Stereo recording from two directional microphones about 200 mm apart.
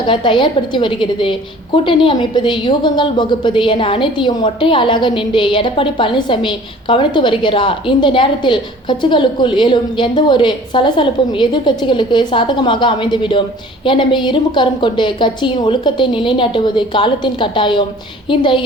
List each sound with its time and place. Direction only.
0.0 s a woman's voice: 25° left (ahead or behind)